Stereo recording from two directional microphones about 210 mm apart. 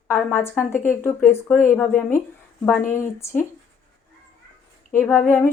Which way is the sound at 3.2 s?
10° left (ahead or behind).